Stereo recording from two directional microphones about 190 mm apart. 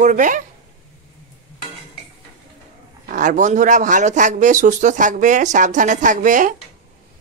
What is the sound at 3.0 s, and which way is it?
Speech, 45° right (ahead or behind).